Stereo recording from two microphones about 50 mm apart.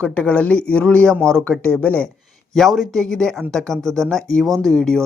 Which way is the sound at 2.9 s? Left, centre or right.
Centre.